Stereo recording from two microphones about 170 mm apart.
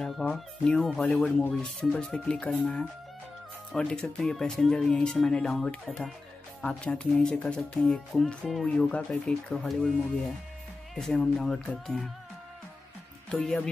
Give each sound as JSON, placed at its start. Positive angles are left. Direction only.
{"t": 0.0, "sound": "speech", "side_deg": 0}
{"t": 11.0, "sound": "speech", "side_deg": 0}
{"t": 13.3, "sound": "speech", "side_deg": 5}